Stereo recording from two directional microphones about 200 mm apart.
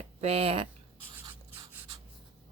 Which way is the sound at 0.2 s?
30° right (ahead or behind).